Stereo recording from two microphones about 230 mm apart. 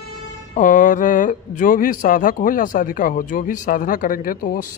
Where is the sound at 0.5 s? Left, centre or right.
Left.